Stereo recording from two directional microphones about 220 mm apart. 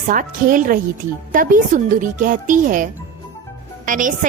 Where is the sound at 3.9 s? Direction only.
35° right (ahead or behind).